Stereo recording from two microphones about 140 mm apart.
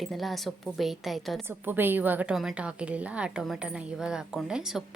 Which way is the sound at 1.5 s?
15° right (ahead or behind).